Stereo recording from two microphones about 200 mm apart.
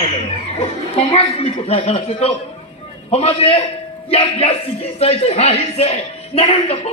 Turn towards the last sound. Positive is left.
turn(degrees=30)  # may be behind; listen again after turning